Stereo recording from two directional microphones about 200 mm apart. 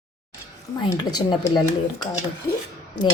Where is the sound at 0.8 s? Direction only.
20° left (ahead or behind).